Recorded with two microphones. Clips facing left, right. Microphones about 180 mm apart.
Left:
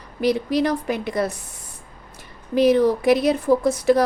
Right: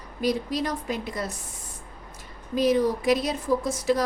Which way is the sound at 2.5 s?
65° left (ahead or behind).